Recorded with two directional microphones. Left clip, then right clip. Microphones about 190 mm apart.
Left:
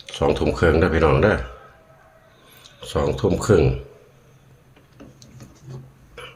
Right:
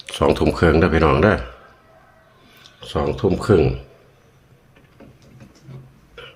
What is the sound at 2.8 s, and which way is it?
Speech, 10° right (ahead or behind).